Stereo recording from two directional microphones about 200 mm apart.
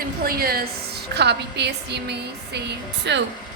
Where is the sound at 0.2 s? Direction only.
50° right (ahead or behind).